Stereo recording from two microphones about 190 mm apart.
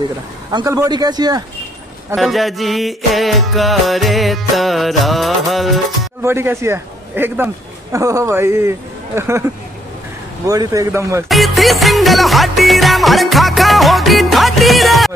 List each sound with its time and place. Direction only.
0.5 s speech: 20° right (ahead or behind)
2.1 s music: centre (ahead or behind)
6.2 s a man's voice: 15° right (ahead or behind)
10.5 s speech: 20° right (ahead or behind)
11.2 s music: centre (ahead or behind)